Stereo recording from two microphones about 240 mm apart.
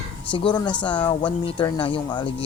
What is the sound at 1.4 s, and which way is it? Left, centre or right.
Speech, left.